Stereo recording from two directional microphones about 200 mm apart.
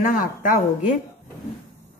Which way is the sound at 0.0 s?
40° left (ahead or behind).